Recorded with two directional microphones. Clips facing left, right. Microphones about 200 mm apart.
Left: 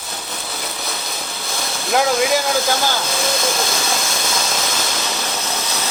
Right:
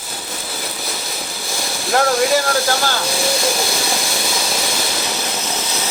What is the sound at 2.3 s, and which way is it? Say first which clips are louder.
Speech: right 1 dB; 15° left (ahead or behind).